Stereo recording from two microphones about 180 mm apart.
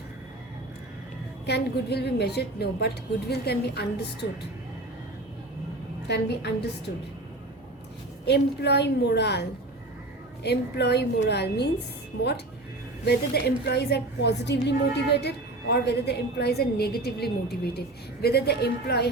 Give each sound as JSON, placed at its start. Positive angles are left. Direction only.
{"t": 1.5, "sound": "a woman's voice", "side_deg": 65}
{"t": 6.1, "sound": "a woman's voice", "side_deg": 70}
{"t": 8.2, "sound": "a woman's voice", "side_deg": 70}
{"t": 13.1, "sound": "a woman's voice", "side_deg": 65}